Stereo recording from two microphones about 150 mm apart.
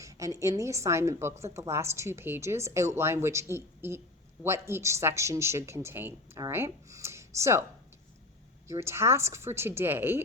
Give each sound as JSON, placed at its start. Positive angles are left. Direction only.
{"t": 0.0, "sound": "a woman's voice", "side_deg": -20}
{"t": 8.6, "sound": "speech", "side_deg": -20}